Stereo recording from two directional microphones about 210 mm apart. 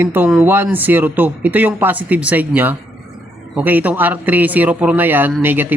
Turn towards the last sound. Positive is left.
turn(degrees=-10)  # may be behind; listen again after turning